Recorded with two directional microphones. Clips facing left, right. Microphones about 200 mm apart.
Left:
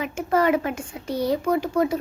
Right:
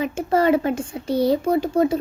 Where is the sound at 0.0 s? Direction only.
30° right (ahead or behind).